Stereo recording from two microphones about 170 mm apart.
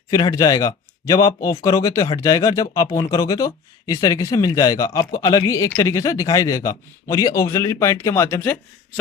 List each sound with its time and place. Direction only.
0.1 s speech: 20° left (ahead or behind)